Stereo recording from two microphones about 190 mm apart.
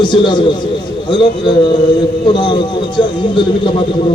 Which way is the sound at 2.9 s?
25° left (ahead or behind).